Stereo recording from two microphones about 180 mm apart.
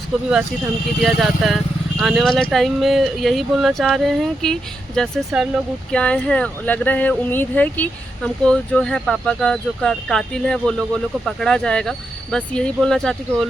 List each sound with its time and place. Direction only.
1.0 s speech: centre (ahead or behind)